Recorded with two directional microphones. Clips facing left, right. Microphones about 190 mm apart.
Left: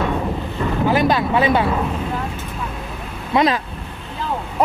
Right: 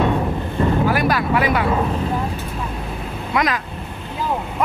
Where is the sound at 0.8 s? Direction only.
20° left (ahead or behind).